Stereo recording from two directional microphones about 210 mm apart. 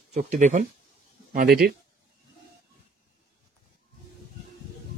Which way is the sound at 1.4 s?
50° right (ahead or behind).